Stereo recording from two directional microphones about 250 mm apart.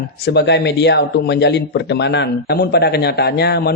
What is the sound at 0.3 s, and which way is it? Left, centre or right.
Speech, left.